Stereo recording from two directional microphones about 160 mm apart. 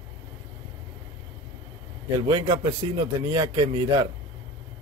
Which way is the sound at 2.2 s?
25° right (ahead or behind).